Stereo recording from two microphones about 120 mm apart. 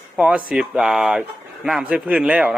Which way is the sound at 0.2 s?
5° right (ahead or behind).